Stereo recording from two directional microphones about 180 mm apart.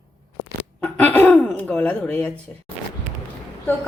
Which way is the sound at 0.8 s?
10° left (ahead or behind).